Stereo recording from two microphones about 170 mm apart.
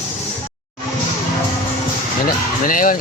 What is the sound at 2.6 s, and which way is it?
Speech, 50° left (ahead or behind).